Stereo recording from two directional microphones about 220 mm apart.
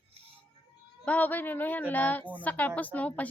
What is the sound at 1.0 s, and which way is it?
Speech, 5° left (ahead or behind).